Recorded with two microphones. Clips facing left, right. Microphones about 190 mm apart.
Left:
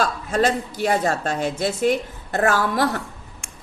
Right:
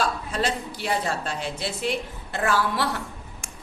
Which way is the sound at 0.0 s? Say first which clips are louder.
Left 5 dB; 45° left (ahead or behind).